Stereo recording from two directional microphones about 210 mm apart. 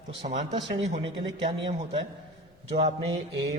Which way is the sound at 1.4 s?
25° right (ahead or behind).